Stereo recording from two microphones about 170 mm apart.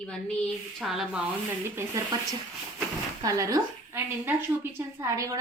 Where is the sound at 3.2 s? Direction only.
20° right (ahead or behind).